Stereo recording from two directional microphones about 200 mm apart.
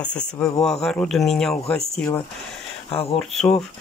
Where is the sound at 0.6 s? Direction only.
Centre (ahead or behind).